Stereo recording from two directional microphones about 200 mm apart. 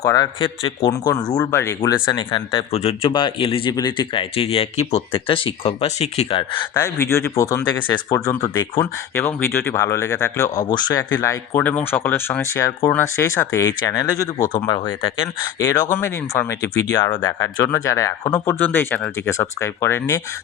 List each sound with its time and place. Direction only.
0.0 s speech: 20° left (ahead or behind)